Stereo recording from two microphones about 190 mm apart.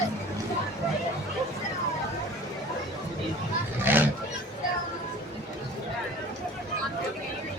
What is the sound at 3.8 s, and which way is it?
Roaring cats, 10° right (ahead or behind).